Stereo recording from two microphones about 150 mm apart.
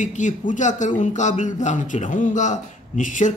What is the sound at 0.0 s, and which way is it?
A man's voice, 55° left (ahead or behind).